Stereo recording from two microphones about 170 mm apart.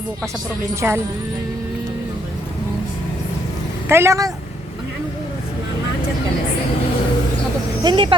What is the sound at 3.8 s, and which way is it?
Speech, 15° right (ahead or behind).